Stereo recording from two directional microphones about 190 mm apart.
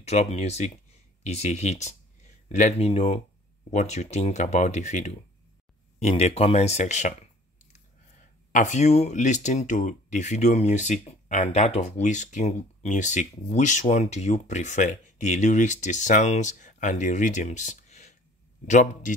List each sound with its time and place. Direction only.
0.0 s speech: 35° left (ahead or behind)
8.5 s speech: 40° left (ahead or behind)